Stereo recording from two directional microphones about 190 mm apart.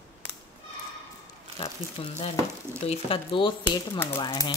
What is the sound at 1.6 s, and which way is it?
Speech, 30° left (ahead or behind).